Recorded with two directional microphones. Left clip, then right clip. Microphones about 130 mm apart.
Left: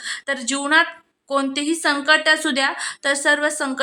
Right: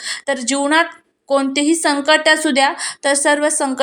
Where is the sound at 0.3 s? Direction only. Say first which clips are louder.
Right 4 dB; 20° right (ahead or behind).